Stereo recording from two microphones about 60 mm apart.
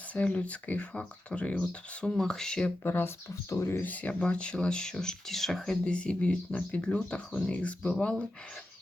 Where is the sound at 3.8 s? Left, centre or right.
Left; by 5.9 s centre.